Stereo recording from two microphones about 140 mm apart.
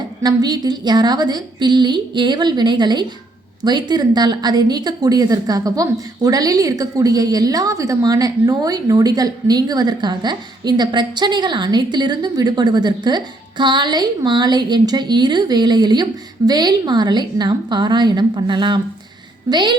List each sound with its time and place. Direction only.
0.2 s a woman's voice: 30° right (ahead or behind)